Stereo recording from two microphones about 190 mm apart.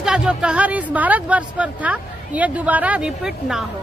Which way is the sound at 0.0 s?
5° right (ahead or behind).